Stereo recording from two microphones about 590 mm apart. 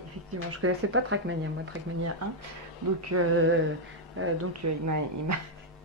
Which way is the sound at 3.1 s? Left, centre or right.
Right.